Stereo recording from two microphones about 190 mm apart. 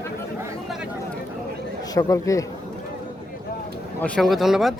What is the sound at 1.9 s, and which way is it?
Speech, 15° left (ahead or behind).